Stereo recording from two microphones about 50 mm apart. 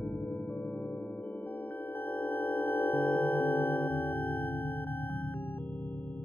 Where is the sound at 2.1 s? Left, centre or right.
Left.